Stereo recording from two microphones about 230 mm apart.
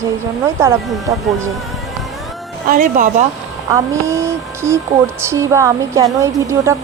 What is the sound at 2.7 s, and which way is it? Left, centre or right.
Speech, right.